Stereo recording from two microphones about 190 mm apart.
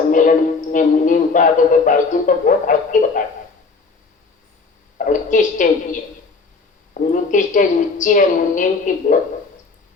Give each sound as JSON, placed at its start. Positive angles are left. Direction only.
{"t": 0.1, "sound": "a man's voice", "side_deg": 45}
{"t": 4.9, "sound": "a man's voice", "side_deg": 40}
{"t": 7.1, "sound": "a man's voice", "side_deg": 40}